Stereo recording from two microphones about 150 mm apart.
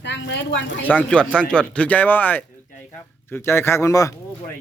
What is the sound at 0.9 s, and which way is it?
Speech, 10° left (ahead or behind).